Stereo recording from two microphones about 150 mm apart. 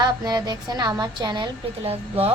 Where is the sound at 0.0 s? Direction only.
25° right (ahead or behind).